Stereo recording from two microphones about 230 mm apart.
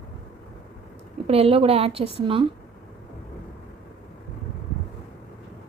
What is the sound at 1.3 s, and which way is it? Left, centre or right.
A woman's voice, right.